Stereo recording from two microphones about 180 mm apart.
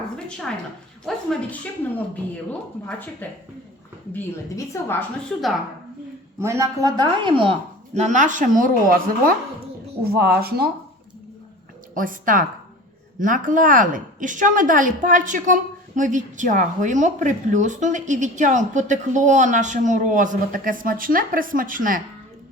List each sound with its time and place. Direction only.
0.3 s a woman's voice: 5° left (ahead or behind)
6.4 s a woman's voice: 15° right (ahead or behind)
7.9 s speech: 40° right (ahead or behind); by 10.7 s 60° right (ahead or behind)
11.9 s speech: 50° right (ahead or behind)